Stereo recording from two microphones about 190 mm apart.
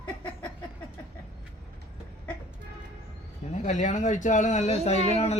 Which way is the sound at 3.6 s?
40° left (ahead or behind).